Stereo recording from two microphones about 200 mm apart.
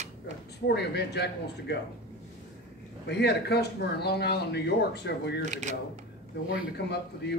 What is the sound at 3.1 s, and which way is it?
Speech, 55° left (ahead or behind).